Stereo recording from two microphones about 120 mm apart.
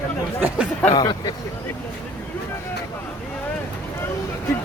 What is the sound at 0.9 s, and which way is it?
Speech, 35° left (ahead or behind).